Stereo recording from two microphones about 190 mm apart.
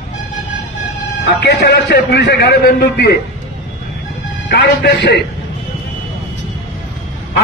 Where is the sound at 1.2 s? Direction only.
65° left (ahead or behind).